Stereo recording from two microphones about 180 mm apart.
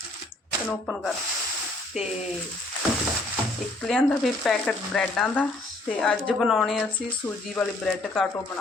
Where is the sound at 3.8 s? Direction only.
Centre (ahead or behind).